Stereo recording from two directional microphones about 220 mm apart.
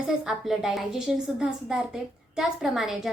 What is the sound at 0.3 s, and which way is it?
A woman's voice, centre (ahead or behind).